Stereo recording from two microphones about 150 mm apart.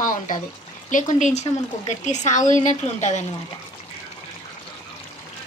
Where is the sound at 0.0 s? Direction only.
65° left (ahead or behind).